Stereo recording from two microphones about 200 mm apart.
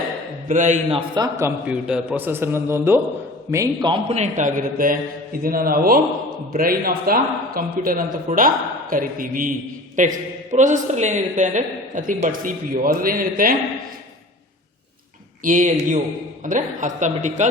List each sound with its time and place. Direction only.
0.4 s a man's voice: 40° right (ahead or behind)
15.4 s a man's voice: 40° right (ahead or behind)